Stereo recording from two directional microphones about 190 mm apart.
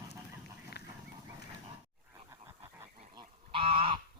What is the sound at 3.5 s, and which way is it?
Goose, 30° right (ahead or behind).